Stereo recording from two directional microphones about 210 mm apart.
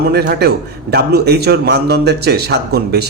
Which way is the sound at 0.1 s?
50° right (ahead or behind).